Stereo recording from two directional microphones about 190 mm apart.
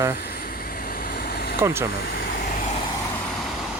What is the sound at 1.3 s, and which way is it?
Vehicle, 55° left (ahead or behind).